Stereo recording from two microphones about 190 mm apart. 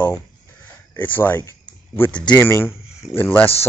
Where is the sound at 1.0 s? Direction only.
10° left (ahead or behind).